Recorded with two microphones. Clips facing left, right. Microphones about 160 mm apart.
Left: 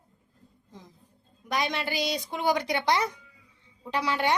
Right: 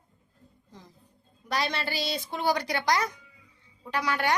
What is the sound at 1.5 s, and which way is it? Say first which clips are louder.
A woman's voice: left 1 dB; 20° left (ahead or behind).